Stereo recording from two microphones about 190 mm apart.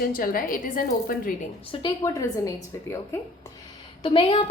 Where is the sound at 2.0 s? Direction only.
15° left (ahead or behind).